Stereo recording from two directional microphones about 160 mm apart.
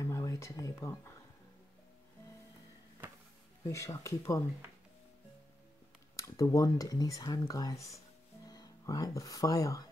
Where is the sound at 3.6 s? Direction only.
20° left (ahead or behind).